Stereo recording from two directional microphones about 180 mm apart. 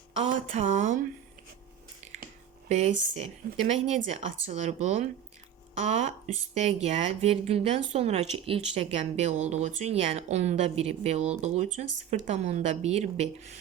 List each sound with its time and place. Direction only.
0.2 s speech: 40° right (ahead or behind)
2.2 s a sound: 40° right (ahead or behind)
3.2 s speech: 40° right (ahead or behind)